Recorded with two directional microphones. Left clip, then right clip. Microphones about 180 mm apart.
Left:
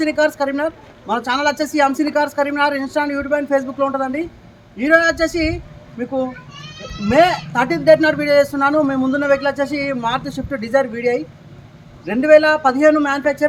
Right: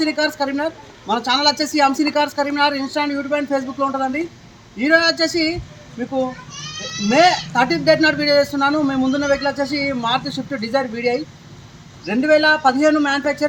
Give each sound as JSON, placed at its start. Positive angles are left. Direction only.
{"t": 0.0, "sound": "speech", "side_deg": 0}